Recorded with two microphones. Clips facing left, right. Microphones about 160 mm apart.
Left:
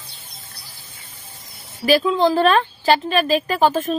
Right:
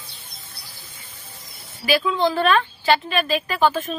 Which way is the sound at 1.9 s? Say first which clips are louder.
Left 4 dB; 35° left (ahead or behind).